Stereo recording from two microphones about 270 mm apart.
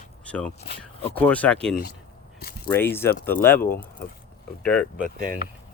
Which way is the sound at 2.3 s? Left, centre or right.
Left.